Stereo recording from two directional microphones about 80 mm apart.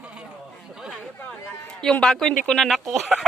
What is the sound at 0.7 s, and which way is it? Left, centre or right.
Chatter, centre.